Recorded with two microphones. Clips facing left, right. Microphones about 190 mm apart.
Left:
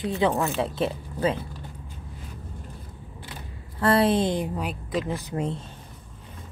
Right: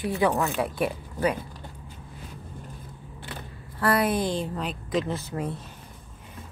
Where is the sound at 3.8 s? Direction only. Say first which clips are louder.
Left 3 dB; 25° left (ahead or behind).